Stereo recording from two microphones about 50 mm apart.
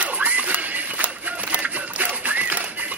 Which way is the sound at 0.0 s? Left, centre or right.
Right.